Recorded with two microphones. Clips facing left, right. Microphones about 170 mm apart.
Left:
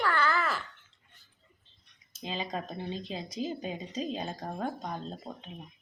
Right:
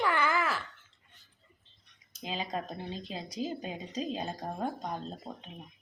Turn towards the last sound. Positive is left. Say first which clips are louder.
# even
turn(degrees=-10)  # may be behind; listen again after turning